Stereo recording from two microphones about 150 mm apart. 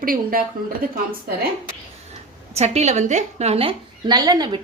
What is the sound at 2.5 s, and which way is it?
A woman's voice, 45° right (ahead or behind).